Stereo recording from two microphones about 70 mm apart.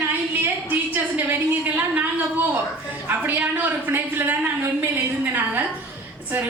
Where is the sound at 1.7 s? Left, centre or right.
Right.